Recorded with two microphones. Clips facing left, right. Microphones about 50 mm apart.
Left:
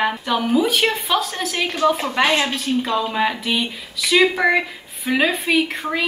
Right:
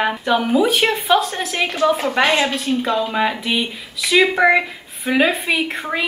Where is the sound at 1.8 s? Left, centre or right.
Right.